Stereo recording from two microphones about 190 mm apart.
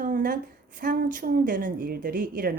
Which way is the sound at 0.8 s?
45° right (ahead or behind).